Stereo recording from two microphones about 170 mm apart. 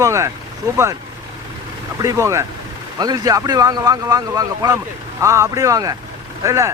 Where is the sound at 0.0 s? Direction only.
15° right (ahead or behind).